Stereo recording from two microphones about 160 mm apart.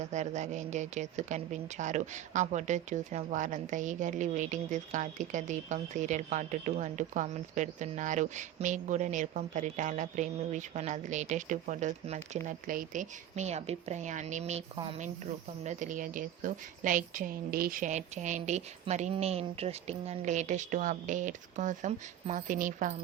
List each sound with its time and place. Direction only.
0.0 s a woman's voice: 45° right (ahead or behind)
15.6 s a woman's voice: 50° right (ahead or behind)